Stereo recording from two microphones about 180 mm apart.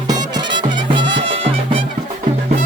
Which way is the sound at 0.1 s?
20° right (ahead or behind).